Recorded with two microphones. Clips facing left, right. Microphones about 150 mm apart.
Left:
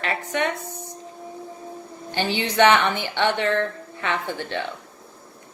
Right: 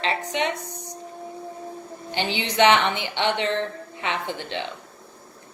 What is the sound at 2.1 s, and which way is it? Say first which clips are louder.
A woman's voice: left 2 dB; 20° right (ahead or behind).